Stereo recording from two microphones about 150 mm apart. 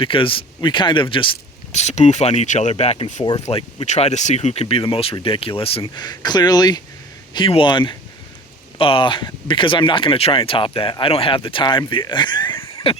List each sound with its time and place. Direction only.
0.0 s speech: 35° left (ahead or behind)
1.7 s speech: 50° left (ahead or behind)
5.8 s speech: 25° left (ahead or behind)
12.5 s a sound: 20° left (ahead or behind)